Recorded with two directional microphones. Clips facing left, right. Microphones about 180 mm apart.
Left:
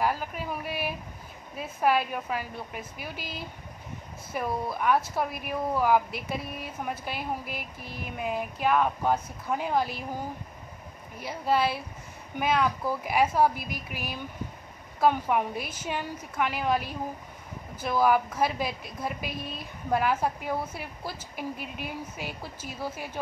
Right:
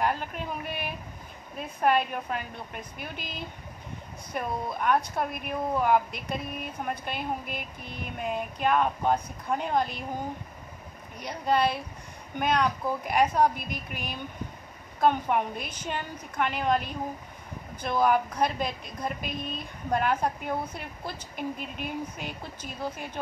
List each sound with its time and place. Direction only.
0.0 s speech: 5° left (ahead or behind)
11.1 s speech: 5° left (ahead or behind)
18.0 s speech: 5° left (ahead or behind)